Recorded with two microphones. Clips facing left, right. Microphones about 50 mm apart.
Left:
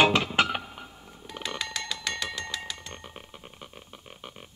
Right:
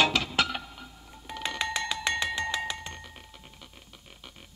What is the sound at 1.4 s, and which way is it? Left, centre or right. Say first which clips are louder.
Music: right 3 dB; right.